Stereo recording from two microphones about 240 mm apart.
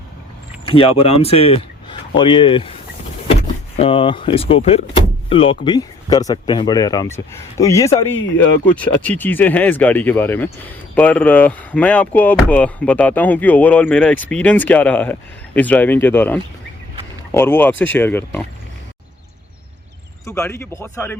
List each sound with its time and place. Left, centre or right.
0.6 s speech: left
3.8 s speech: left
20.2 s speech: centre